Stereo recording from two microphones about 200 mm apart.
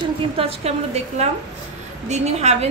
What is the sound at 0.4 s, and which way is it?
A woman's voice, 30° right (ahead or behind).